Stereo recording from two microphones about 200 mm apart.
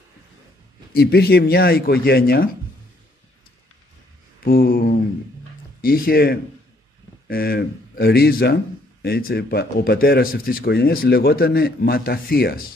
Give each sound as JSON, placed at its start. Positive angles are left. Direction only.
{"t": 0.9, "sound": "speech", "side_deg": 50}
{"t": 4.5, "sound": "speech", "side_deg": 45}